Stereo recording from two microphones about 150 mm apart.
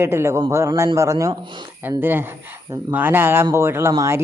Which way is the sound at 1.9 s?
15° right (ahead or behind).